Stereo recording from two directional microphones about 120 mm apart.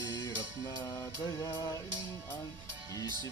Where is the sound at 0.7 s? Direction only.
30° left (ahead or behind).